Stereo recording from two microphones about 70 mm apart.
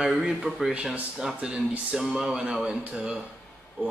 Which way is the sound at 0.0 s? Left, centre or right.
Centre.